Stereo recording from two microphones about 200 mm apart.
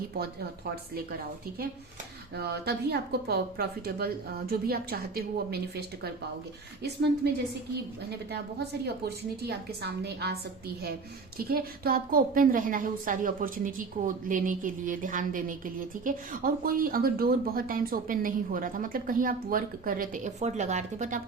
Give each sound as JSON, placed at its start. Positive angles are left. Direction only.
{"t": 0.2, "sound": "a woman's voice", "side_deg": -50}
{"t": 2.3, "sound": "a woman's voice", "side_deg": -55}
{"t": 9.0, "sound": "a woman's voice", "side_deg": -55}
{"t": 11.3, "sound": "a woman's voice", "side_deg": -50}